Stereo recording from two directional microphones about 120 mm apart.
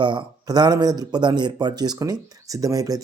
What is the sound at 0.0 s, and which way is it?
Speech, 40° right (ahead or behind).